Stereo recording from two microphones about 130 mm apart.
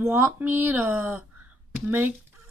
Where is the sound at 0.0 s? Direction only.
15° right (ahead or behind).